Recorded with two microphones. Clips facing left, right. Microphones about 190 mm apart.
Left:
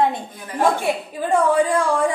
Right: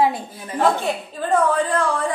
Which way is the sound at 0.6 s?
10° left (ahead or behind).